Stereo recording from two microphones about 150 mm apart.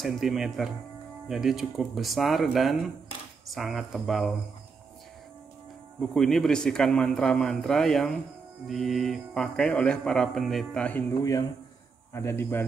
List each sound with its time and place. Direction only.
0.0 s speech: centre (ahead or behind)
5.9 s speech: centre (ahead or behind)
12.1 s speech: 20° left (ahead or behind)